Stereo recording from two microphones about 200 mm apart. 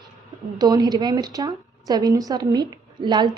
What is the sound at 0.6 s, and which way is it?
A woman's voice, 20° right (ahead or behind).